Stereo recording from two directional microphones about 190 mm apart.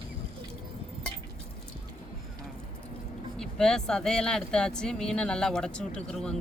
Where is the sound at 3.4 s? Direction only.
5° left (ahead or behind).